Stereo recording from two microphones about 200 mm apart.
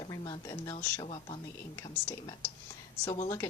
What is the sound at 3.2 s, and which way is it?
Speech, 15° left (ahead or behind).